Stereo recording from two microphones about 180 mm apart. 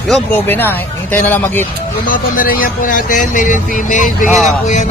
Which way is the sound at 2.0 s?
50° left (ahead or behind).